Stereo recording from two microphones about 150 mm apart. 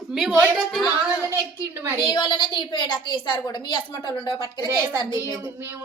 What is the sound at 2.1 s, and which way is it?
A woman's voice, 30° left (ahead or behind).